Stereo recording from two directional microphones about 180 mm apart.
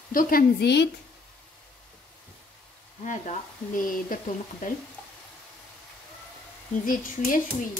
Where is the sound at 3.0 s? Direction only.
45° left (ahead or behind).